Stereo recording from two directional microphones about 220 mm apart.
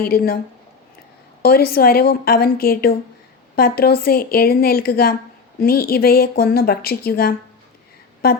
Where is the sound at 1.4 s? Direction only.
45° left (ahead or behind).